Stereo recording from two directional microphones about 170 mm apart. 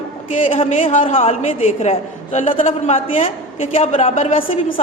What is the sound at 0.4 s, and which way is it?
A woman's voice, 35° left (ahead or behind).